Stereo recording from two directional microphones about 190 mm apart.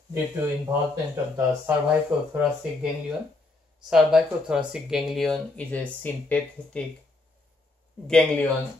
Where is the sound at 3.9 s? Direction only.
5° right (ahead or behind).